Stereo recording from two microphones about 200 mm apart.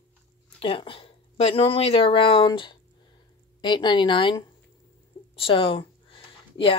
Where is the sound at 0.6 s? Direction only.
25° left (ahead or behind).